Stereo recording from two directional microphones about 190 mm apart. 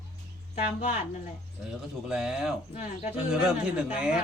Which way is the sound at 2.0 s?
5° right (ahead or behind).